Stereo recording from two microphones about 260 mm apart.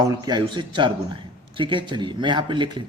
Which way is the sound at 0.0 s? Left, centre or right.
Centre.